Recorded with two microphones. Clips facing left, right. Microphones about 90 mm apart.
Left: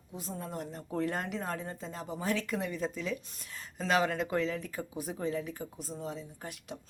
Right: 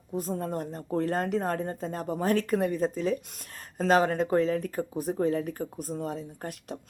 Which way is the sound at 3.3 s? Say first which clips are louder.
Right 1 dB; 55° right (ahead or behind).